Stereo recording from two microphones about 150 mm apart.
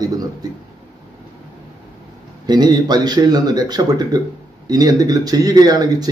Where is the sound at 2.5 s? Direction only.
30° right (ahead or behind).